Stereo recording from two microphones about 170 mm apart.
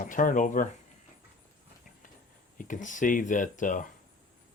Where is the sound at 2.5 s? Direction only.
50° left (ahead or behind).